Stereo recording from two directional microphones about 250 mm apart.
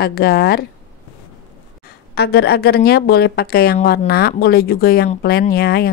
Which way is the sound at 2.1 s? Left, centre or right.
Left.